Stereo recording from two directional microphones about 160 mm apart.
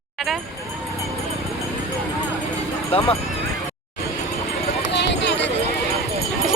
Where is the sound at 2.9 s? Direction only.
35° left (ahead or behind).